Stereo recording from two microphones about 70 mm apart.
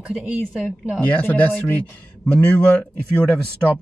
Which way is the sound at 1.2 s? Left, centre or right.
Left.